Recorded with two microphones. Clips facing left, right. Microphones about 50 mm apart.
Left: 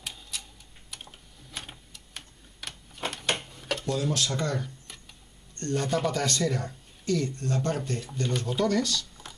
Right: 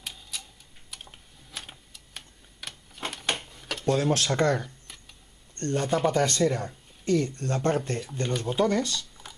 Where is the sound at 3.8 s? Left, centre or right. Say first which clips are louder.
Right 6 dB; right.